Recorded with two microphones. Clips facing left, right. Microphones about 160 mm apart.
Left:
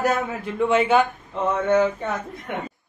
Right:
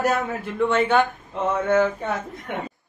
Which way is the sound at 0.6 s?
Centre (ahead or behind).